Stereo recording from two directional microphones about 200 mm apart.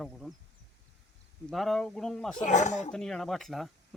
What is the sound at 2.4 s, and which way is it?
Speech, 35° left (ahead or behind).